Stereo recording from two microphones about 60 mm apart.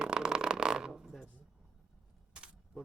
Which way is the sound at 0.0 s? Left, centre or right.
Centre.